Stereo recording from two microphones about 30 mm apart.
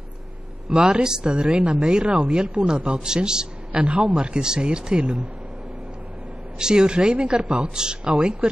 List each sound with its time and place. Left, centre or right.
0.7 s speech: centre
6.6 s speech: right